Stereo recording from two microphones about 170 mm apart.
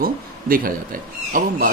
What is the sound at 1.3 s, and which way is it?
Speech, 55° right (ahead or behind).